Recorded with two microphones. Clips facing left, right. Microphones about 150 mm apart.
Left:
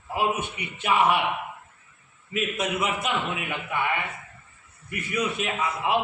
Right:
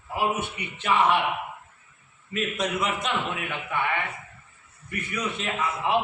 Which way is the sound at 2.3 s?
5° left (ahead or behind).